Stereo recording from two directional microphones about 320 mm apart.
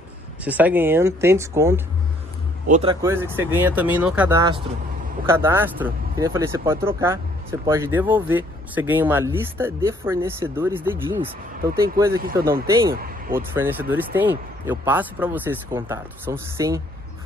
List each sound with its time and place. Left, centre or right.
0.4 s speech: centre
12.2 s speech: right
13.4 s speech: centre